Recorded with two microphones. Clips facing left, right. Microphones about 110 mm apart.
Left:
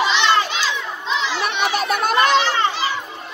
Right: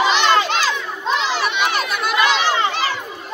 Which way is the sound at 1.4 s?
45° left (ahead or behind).